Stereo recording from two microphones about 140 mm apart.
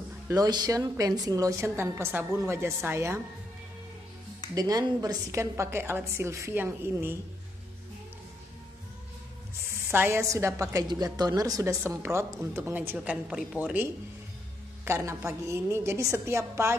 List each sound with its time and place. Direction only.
0.3 s a woman's voice: 30° right (ahead or behind)
4.6 s a woman's voice: 25° right (ahead or behind)
9.8 s a woman's voice: 15° right (ahead or behind)
14.9 s a woman's voice: 20° right (ahead or behind)